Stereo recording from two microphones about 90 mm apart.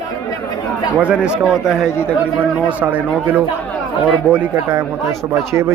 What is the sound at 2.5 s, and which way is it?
Speech, 15° right (ahead or behind).